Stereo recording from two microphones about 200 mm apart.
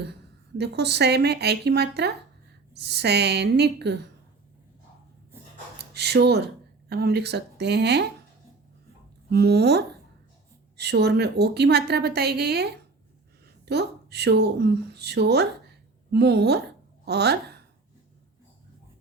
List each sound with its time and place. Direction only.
0.6 s a woman's voice: 55° right (ahead or behind)
5.9 s speech: 55° right (ahead or behind)
9.3 s a woman's voice: 55° right (ahead or behind)